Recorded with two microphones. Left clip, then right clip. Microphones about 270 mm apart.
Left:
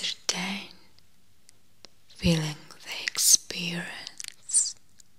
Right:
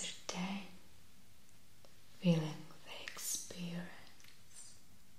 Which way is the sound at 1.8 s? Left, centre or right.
Left.